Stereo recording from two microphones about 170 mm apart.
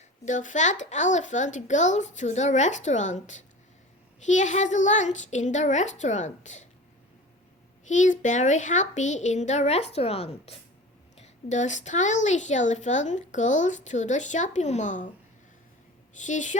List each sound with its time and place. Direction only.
0.3 s a woman's voice: 45° left (ahead or behind)
7.9 s a woman's voice: 45° left (ahead or behind)
16.1 s a woman's voice: 45° left (ahead or behind)